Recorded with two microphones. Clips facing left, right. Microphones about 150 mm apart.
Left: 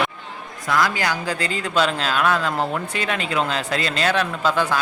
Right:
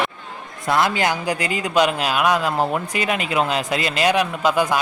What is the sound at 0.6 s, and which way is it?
A man's voice, 25° right (ahead or behind).